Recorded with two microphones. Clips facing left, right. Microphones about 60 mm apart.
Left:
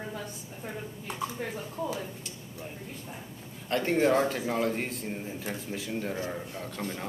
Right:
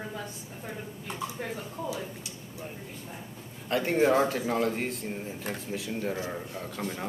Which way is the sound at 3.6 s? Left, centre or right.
Centre.